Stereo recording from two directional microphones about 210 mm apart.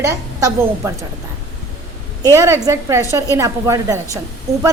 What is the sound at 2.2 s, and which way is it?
A woman's voice, 15° right (ahead or behind).